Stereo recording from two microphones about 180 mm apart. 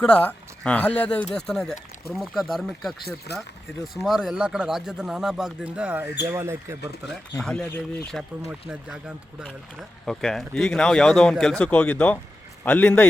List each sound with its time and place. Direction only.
0.0 s speech: 5° left (ahead or behind); by 6.7 s 15° right (ahead or behind)
7.3 s a man's voice: 5° left (ahead or behind)